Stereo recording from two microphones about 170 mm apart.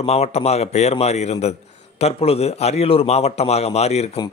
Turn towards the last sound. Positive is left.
turn(degrees=40)  # may be behind; listen again after turning